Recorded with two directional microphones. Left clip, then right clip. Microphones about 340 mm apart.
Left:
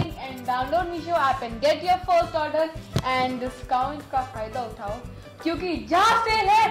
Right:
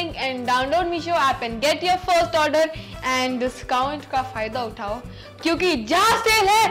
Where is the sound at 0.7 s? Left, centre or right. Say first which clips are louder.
Right 3 dB; right.